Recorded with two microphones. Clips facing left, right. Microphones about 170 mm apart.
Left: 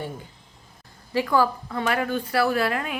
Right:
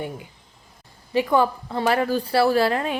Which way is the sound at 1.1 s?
20° right (ahead or behind).